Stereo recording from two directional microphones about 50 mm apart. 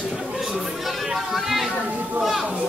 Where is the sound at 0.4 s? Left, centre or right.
Centre.